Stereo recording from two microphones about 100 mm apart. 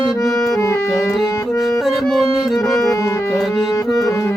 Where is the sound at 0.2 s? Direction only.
35° left (ahead or behind).